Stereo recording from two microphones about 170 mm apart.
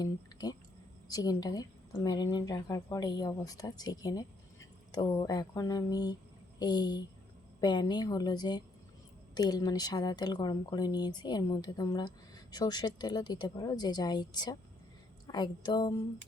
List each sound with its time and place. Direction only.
0.0 s a woman's voice: 20° left (ahead or behind)